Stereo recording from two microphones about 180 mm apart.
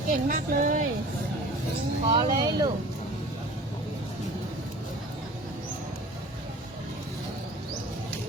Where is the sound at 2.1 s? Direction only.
25° right (ahead or behind).